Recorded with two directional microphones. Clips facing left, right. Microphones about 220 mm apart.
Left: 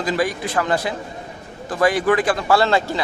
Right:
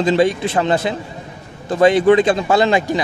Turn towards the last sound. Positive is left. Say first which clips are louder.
# right 3 dB
turn(degrees=-15)  # may be behind; listen again after turning